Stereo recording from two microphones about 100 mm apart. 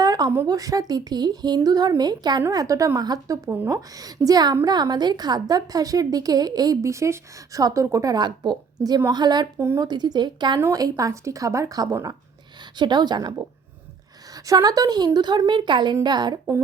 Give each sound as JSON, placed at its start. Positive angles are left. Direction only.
{"t": 0.0, "sound": "a sound", "side_deg": -40}
{"t": 0.4, "sound": "a woman's voice", "side_deg": -40}
{"t": 9.6, "sound": "speech", "side_deg": -25}
{"t": 9.8, "sound": "a woman's voice", "side_deg": -45}
{"t": 10.6, "sound": "a woman's voice", "side_deg": -35}
{"t": 12.7, "sound": "a woman's voice", "side_deg": -45}
{"t": 14.3, "sound": "a woman's voice", "side_deg": -40}